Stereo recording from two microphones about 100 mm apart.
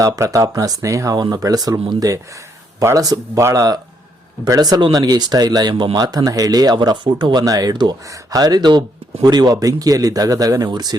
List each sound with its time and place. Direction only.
0.0 s speech: 35° right (ahead or behind)